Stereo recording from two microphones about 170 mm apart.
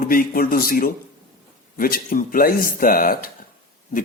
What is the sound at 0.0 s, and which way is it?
A man's voice, 60° left (ahead or behind).